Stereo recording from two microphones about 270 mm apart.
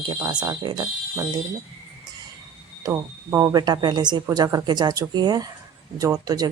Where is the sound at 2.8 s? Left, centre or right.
Centre.